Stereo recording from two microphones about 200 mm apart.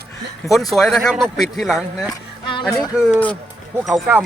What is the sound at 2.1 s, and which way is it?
Music, 25° left (ahead or behind).